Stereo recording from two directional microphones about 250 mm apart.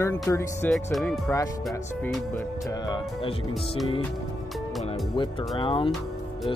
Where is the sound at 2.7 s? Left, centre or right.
Centre.